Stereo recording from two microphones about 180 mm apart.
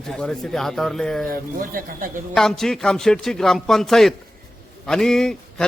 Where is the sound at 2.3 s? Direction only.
Centre (ahead or behind).